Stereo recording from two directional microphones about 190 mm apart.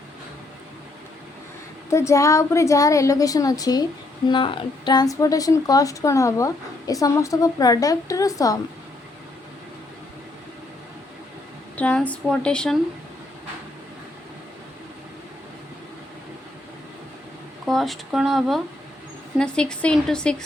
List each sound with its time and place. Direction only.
1.9 s a woman's voice: 15° left (ahead or behind)
11.8 s speech: 10° left (ahead or behind)
17.7 s speech: centre (ahead or behind)